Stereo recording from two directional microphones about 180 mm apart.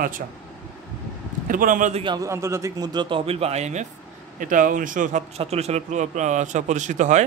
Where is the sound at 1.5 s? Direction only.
50° right (ahead or behind).